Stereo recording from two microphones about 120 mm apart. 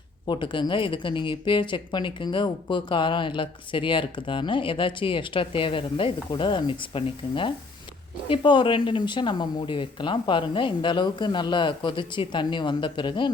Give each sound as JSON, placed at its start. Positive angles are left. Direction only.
{"t": 0.3, "sound": "a woman's voice", "side_deg": 40}